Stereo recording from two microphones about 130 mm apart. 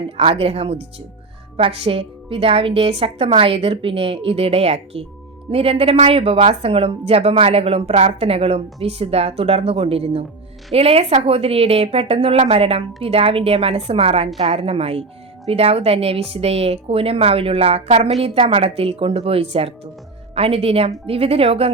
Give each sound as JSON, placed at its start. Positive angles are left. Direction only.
{"t": 0.2, "sound": "speech", "side_deg": -50}